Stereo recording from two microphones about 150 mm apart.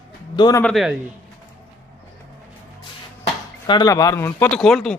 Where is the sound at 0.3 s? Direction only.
30° left (ahead or behind).